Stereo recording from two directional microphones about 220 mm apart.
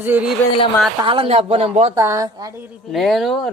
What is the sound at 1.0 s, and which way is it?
Speech, 25° right (ahead or behind).